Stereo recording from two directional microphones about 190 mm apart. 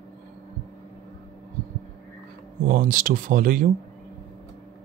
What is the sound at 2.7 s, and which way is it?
Speech, 45° right (ahead or behind).